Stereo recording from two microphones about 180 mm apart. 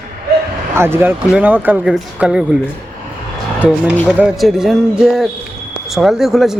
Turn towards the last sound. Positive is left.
turn(degrees=0)  # may be behind; listen again after turning